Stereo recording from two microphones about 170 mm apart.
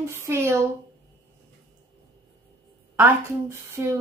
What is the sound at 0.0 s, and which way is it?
Speech, 15° right (ahead or behind).